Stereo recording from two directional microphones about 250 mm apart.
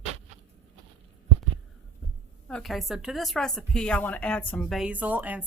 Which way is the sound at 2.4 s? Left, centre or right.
Centre.